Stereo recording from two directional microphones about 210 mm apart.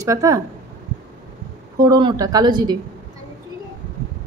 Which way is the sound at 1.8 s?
20° right (ahead or behind).